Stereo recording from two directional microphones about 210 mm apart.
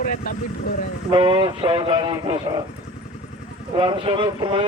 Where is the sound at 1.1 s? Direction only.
25° right (ahead or behind).